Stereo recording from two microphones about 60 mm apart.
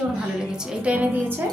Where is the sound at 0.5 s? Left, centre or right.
Centre.